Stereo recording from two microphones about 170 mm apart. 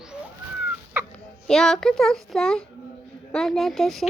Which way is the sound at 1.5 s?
Centre (ahead or behind).